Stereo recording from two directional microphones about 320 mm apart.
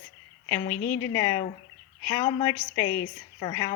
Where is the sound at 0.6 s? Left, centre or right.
Left.